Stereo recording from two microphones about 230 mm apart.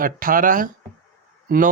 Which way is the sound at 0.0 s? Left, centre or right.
Right.